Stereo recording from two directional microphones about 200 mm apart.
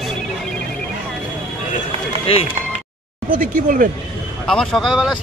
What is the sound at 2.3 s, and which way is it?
Speech, 30° left (ahead or behind).